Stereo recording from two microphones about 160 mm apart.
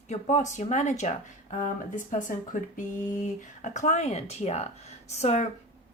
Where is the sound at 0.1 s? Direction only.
45° left (ahead or behind).